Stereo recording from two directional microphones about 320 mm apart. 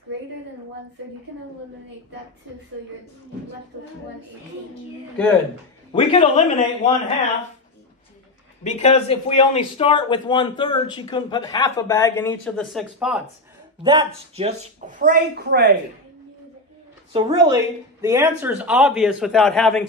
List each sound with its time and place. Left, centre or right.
5.9 s a man's voice: centre
8.6 s a man's voice: left; by 13.2 s centre
13.8 s speech: centre
17.1 s a woman's voice: centre